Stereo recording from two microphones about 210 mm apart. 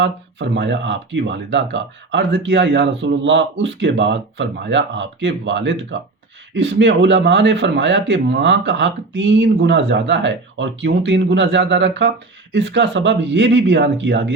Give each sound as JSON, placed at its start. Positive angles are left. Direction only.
{"t": 0.0, "sound": "speech", "side_deg": -60}